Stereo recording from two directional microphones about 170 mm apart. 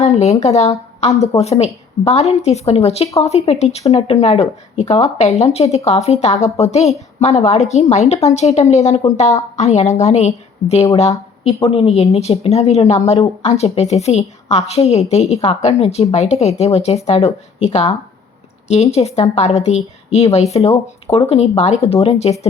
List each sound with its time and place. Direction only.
0.1 s speech: 40° left (ahead or behind)
1.1 s a woman's voice: 20° left (ahead or behind)
1.4 s a woman's voice: 40° left (ahead or behind)
18.9 s a woman's voice: 35° left (ahead or behind)